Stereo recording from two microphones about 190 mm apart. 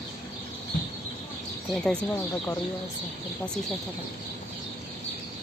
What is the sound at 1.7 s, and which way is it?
Speech, 5° left (ahead or behind).